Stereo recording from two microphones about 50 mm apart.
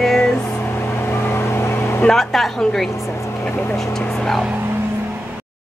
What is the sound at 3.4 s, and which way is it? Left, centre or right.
Speech, left.